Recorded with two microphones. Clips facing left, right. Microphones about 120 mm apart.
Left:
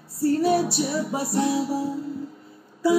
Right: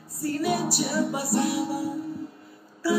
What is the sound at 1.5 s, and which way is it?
Music, 25° left (ahead or behind).